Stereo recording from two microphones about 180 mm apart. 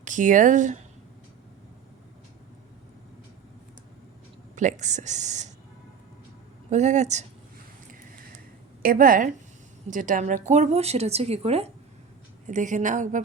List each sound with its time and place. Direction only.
0.0 s speech: 45° right (ahead or behind)
4.5 s a woman's voice: 40° right (ahead or behind)
6.7 s a woman's voice: 40° right (ahead or behind)
8.8 s a woman's voice: 50° right (ahead or behind)